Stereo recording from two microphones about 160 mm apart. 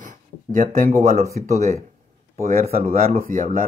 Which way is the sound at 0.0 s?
55° right (ahead or behind).